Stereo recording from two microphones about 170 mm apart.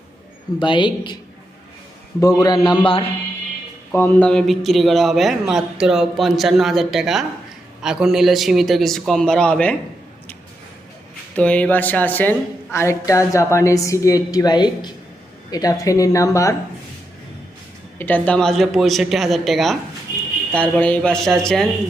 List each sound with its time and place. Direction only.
0.6 s speech: 30° left (ahead or behind)
2.2 s speech: 20° left (ahead or behind)
3.9 s a man's voice: 10° left (ahead or behind)
11.3 s a woman's voice: 5° left (ahead or behind)
17.9 s a man's voice: 10° left (ahead or behind)